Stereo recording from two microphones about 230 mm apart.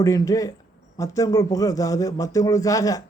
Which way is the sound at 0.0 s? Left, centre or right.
Centre.